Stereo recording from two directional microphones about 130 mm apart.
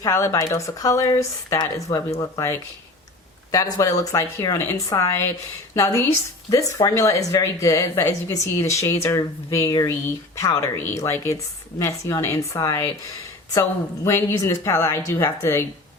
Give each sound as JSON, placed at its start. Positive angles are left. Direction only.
{"t": 0.0, "sound": "speech", "side_deg": 20}